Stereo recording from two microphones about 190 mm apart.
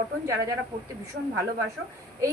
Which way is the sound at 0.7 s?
20° right (ahead or behind).